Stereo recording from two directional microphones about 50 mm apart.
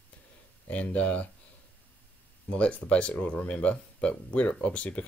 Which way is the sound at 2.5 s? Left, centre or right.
Left.